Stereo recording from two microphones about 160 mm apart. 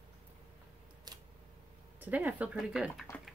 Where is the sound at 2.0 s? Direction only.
10° right (ahead or behind).